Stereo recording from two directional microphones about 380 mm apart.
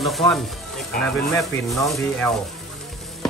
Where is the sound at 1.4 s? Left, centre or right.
Centre.